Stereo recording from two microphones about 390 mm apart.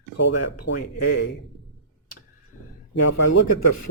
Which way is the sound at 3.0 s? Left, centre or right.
Left.